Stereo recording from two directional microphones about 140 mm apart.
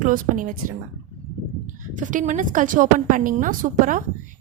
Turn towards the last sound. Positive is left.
turn(degrees=-70)  # may be behind; listen again after turning